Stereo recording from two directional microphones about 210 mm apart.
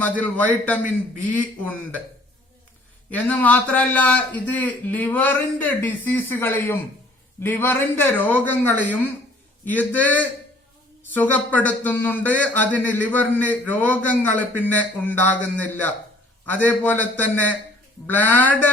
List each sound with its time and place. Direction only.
0.2 s speech: 5° left (ahead or behind)
3.1 s speech: 5° left (ahead or behind)